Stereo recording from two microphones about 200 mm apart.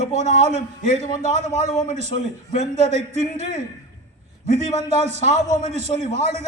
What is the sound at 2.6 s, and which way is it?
Speech, 35° right (ahead or behind).